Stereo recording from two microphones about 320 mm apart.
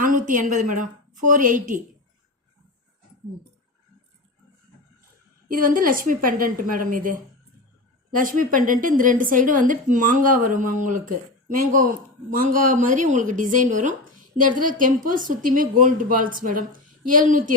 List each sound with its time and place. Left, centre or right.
0.1 s a woman's voice: right
5.5 s a woman's voice: right